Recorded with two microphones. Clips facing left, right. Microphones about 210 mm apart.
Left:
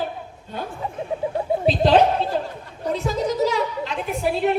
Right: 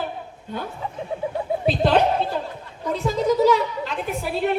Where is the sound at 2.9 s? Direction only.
55° right (ahead or behind).